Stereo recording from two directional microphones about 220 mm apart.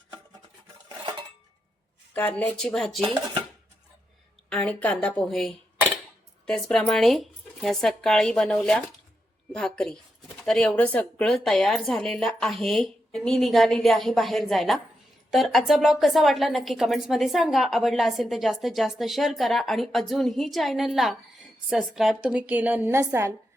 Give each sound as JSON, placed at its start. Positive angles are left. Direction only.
{"t": 0.9, "sound": "dishes", "side_deg": -20}
{"t": 2.1, "sound": "a woman's voice", "side_deg": 5}
{"t": 4.4, "sound": "a woman's voice", "side_deg": 5}